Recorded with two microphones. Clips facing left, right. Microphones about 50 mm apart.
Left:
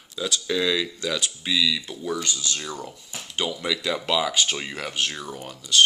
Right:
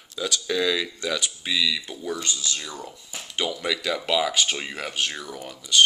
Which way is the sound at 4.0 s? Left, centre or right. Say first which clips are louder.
Right 2 dB; centre.